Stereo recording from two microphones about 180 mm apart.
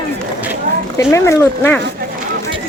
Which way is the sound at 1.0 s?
15° left (ahead or behind).